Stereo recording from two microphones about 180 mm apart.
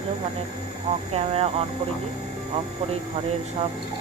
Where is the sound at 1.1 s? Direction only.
35° right (ahead or behind).